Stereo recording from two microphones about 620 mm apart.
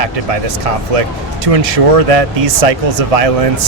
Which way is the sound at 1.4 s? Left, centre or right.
Right.